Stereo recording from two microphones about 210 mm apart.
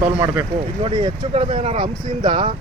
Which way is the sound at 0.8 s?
25° right (ahead or behind).